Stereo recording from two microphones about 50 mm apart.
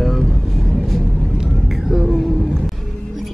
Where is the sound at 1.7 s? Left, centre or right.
Centre.